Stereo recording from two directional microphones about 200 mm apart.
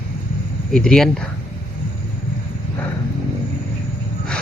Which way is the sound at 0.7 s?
5° left (ahead or behind).